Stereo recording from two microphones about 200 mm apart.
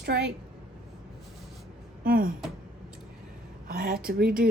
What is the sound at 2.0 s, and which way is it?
Speech, 45° right (ahead or behind).